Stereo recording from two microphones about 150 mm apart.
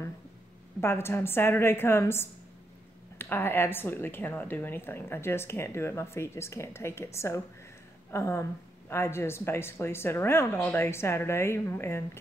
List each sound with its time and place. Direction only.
0.7 s a woman's voice: 15° left (ahead or behind)